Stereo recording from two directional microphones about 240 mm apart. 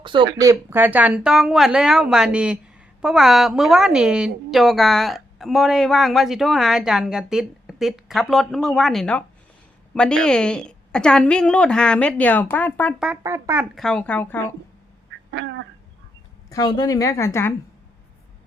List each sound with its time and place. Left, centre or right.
0.0 s a woman's voice: right; by 13.1 s centre
13.1 s a woman's voice: centre
15.3 s duck: right
16.5 s a woman's voice: centre